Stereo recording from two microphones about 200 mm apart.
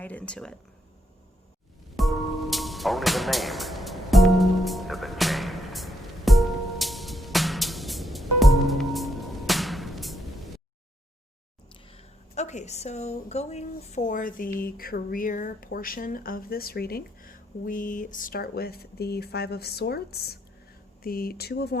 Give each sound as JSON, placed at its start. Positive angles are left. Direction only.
{"t": 0.0, "sound": "speech", "side_deg": 5}
{"t": 2.0, "sound": "music", "side_deg": 0}
{"t": 11.9, "sound": "a woman's voice", "side_deg": 35}